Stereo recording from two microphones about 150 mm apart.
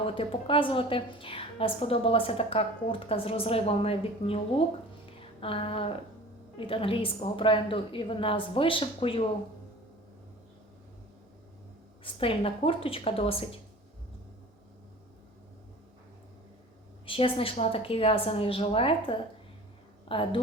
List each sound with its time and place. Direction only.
0.0 s a woman's voice: 35° left (ahead or behind)
12.2 s a woman's voice: 35° left (ahead or behind)
17.1 s a woman's voice: 35° left (ahead or behind)